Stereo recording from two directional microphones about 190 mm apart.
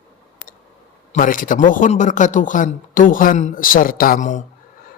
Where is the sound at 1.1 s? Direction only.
45° left (ahead or behind).